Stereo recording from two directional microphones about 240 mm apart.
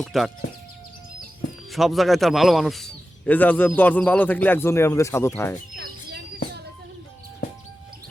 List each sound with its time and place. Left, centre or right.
0.0 s speech: centre
1.7 s a man's voice: centre
5.7 s a sound: right